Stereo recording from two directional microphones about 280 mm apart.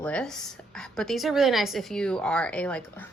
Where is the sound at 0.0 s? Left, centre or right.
Centre.